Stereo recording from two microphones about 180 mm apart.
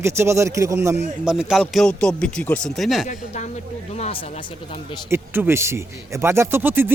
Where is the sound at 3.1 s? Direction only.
40° left (ahead or behind).